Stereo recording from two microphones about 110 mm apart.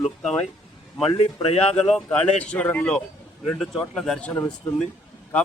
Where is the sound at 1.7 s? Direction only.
5° left (ahead or behind).